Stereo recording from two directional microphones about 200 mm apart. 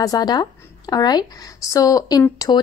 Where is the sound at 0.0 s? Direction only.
20° left (ahead or behind).